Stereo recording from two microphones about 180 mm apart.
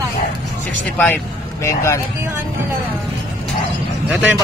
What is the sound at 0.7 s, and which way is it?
Speech, 10° left (ahead or behind).